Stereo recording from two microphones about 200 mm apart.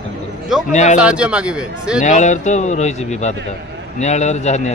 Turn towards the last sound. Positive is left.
turn(degrees=35)  # may be behind; listen again after turning